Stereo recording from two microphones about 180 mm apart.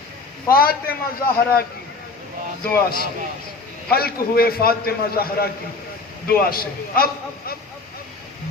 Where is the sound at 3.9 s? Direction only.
55° left (ahead or behind).